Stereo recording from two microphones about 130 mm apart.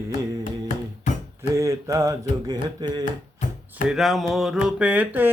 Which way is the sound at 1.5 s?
25° right (ahead or behind).